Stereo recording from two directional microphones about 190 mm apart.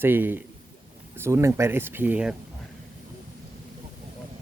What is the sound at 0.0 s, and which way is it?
Speech, 10° right (ahead or behind).